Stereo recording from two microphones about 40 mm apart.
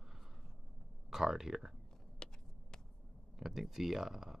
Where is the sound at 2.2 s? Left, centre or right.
Centre.